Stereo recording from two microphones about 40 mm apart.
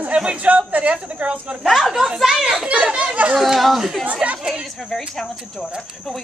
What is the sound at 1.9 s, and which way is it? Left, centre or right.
Speech, centre.